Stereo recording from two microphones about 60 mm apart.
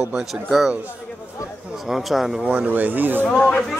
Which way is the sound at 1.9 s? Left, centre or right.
Centre.